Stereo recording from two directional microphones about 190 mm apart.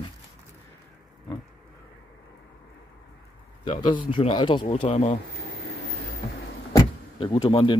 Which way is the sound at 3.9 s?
25° left (ahead or behind).